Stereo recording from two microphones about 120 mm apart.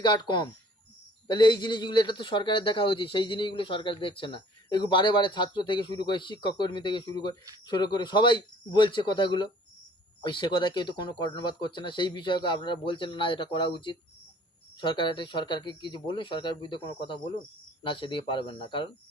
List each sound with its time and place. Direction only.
0.0 s a man's voice: 35° left (ahead or behind)